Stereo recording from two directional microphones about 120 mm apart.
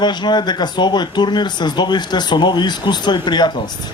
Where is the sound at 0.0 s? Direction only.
35° left (ahead or behind).